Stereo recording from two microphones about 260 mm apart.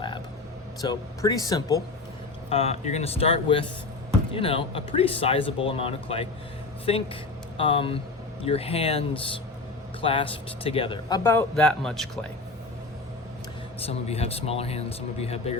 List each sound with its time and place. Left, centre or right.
0.8 s speech: centre
13.7 s speech: left